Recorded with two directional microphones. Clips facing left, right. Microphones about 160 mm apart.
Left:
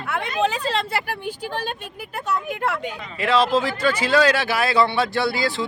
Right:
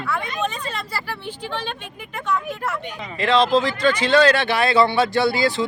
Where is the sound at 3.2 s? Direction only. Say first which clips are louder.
Right 2 dB; 5° left (ahead or behind).